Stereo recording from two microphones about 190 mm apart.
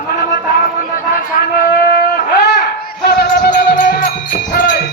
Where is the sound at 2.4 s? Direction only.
55° left (ahead or behind).